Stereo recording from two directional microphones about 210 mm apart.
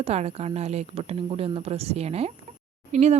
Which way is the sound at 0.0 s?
30° right (ahead or behind).